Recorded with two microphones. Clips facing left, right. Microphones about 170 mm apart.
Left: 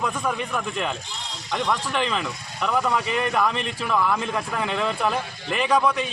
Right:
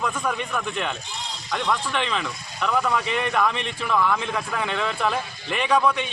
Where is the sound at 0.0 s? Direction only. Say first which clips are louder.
Even; 5° left (ahead or behind).